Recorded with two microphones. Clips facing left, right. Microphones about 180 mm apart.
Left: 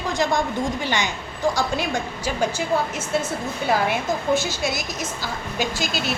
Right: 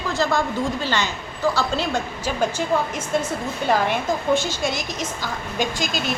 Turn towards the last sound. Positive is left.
turn(degrees=5)  # may be behind; listen again after turning